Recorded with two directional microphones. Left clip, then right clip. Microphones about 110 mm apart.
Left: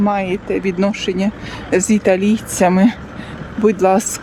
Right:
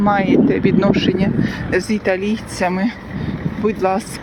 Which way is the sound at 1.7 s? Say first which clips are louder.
Left 4 dB; 55° left (ahead or behind).